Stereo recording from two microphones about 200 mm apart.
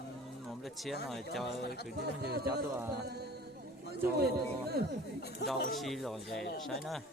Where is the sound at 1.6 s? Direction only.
55° left (ahead or behind).